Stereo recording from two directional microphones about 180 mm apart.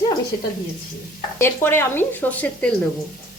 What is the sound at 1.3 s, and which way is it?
Speech, 15° left (ahead or behind).